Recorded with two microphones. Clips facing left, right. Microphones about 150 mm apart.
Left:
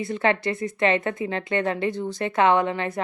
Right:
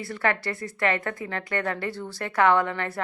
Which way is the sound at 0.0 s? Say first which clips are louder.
Left 4 dB; 20° left (ahead or behind).